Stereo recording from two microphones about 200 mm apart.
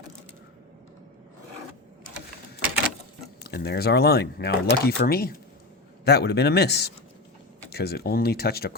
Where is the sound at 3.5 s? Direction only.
50° left (ahead or behind).